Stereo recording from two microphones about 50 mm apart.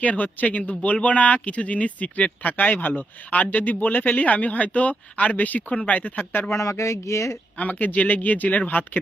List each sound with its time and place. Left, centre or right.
0.0 s speech: left
6.5 s speech: left
7.6 s speech: left